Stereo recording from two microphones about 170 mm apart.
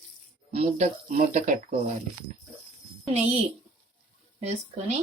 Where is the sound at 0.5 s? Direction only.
45° right (ahead or behind).